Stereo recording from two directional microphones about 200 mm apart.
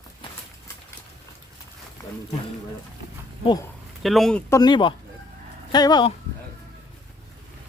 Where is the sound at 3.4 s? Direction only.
20° left (ahead or behind).